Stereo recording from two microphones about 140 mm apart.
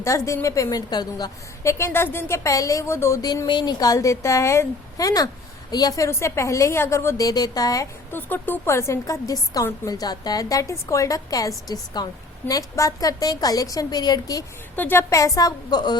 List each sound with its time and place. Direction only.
0.0 s a woman's voice: 20° left (ahead or behind)
8.1 s a woman's voice: 15° left (ahead or behind)
14.8 s a woman's voice: 15° left (ahead or behind)